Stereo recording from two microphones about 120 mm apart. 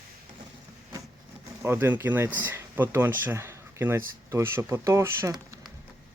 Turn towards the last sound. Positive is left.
turn(degrees=-25)  # may be behind; listen again after turning